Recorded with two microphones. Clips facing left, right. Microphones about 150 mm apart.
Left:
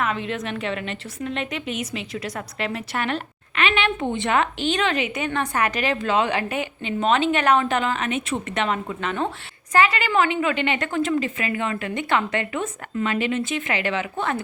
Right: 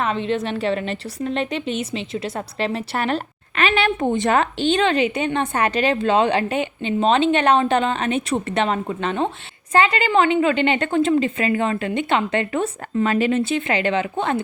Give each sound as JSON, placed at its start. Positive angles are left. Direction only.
{"t": 0.0, "sound": "a woman's voice", "side_deg": -30}